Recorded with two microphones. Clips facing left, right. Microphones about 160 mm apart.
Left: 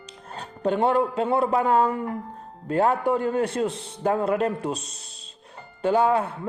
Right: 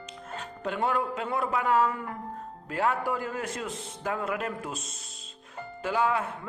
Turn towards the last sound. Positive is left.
turn(degrees=35)  # may be behind; listen again after turning